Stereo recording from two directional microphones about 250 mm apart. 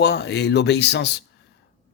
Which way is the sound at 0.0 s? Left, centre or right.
Left.